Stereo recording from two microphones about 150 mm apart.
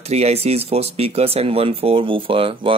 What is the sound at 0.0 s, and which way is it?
Speech, 45° right (ahead or behind).